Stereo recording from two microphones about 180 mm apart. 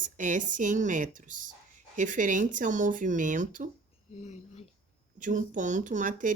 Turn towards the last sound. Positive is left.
turn(degrees=-45)  # may be behind; listen again after turning